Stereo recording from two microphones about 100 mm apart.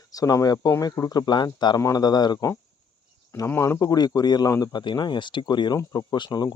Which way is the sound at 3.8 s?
40° left (ahead or behind).